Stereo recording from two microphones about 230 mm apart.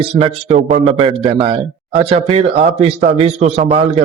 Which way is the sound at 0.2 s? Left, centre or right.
Right.